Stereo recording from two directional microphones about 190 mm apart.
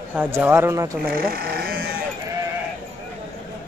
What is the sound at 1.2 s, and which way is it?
Sheep, 50° right (ahead or behind).